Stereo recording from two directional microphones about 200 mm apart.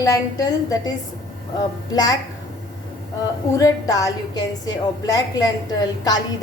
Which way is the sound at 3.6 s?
15° left (ahead or behind).